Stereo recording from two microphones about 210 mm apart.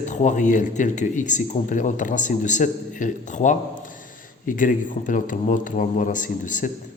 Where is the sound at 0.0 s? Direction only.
35° left (ahead or behind).